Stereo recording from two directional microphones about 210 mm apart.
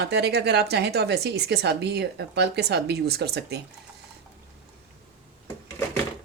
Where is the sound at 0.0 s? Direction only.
50° right (ahead or behind).